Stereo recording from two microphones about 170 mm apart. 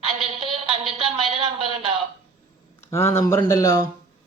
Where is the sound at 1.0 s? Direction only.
35° right (ahead or behind).